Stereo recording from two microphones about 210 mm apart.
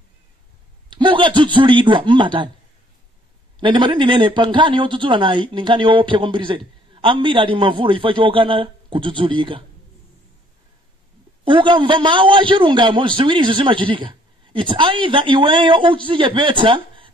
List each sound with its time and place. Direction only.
0.9 s a man's voice: 25° right (ahead or behind)
3.5 s a man's voice: 25° right (ahead or behind)
11.4 s a man's voice: 25° right (ahead or behind)